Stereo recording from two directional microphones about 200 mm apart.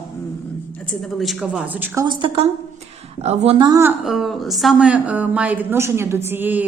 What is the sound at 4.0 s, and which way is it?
A woman's voice, centre (ahead or behind).